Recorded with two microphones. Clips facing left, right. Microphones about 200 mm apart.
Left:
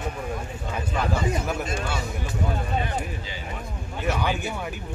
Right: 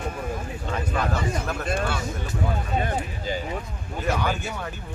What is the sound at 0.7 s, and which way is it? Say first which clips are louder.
Speech: right 1 dB; 10° left (ahead or behind).